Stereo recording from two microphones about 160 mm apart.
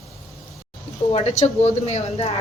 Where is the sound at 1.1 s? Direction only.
40° left (ahead or behind).